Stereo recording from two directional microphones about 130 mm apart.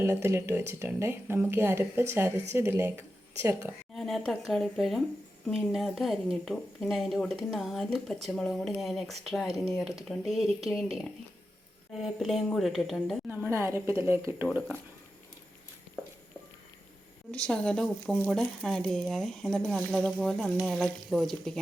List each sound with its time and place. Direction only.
0.0 s speech: 20° right (ahead or behind)
3.9 s speech: centre (ahead or behind)
12.0 s speech: centre (ahead or behind)
13.3 s speech: 15° right (ahead or behind)
17.3 s speech: 10° left (ahead or behind)